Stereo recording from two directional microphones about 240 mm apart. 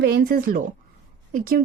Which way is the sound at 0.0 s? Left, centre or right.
Right.